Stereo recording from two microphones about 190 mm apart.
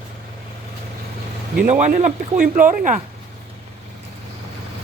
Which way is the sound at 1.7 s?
40° right (ahead or behind).